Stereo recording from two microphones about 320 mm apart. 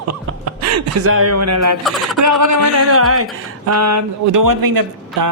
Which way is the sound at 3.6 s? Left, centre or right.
Right.